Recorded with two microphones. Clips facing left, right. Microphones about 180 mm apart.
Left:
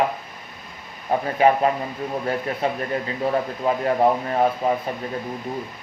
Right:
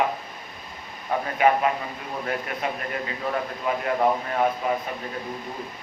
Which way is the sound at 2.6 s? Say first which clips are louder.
Left 5 dB; 30° left (ahead or behind).